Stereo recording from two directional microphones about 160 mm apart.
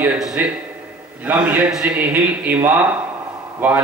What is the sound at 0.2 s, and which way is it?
A man's voice, 5° right (ahead or behind).